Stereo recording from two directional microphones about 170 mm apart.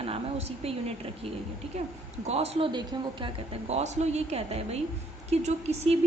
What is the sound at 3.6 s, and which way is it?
A woman's voice, 40° right (ahead or behind).